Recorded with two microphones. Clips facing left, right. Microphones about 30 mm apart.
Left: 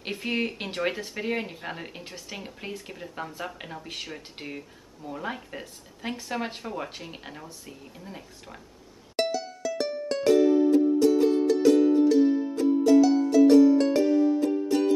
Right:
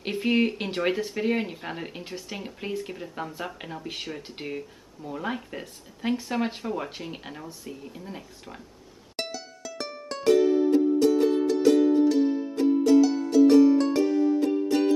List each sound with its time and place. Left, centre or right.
0.0 s speech: centre
9.1 s music: centre
10.7 s music: right
12.1 s music: centre
12.5 s music: right
13.0 s music: centre
13.5 s music: right
13.7 s music: centre
14.4 s music: right